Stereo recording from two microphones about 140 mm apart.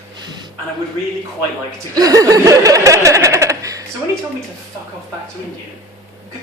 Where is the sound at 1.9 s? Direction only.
25° right (ahead or behind).